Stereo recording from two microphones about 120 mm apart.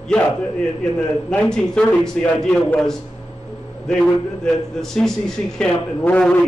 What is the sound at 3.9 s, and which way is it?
A man's voice, 5° left (ahead or behind).